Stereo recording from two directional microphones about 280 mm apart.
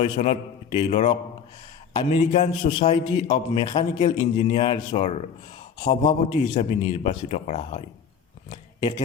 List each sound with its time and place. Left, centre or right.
0.0 s a man's voice: left